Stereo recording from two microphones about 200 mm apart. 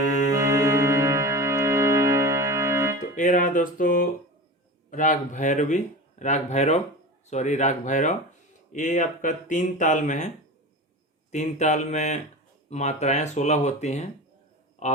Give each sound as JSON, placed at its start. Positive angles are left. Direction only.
{"t": 0.3, "sound": "music", "side_deg": -15}
{"t": 3.0, "sound": "music", "side_deg": 40}
{"t": 4.9, "sound": "speech", "side_deg": 40}